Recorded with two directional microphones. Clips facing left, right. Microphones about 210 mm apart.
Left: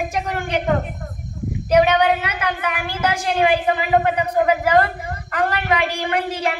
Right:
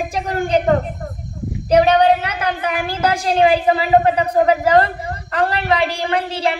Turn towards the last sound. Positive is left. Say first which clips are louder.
# right 2 dB
turn(degrees=-35)  # may be behind; listen again after turning